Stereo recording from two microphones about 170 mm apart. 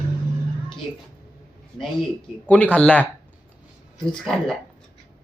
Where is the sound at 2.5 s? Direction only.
5° left (ahead or behind).